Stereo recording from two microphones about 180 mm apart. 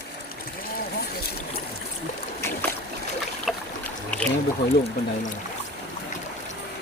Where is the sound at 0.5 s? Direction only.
55° left (ahead or behind).